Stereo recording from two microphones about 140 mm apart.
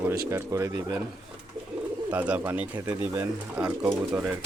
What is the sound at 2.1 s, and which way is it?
Speech, 10° right (ahead or behind).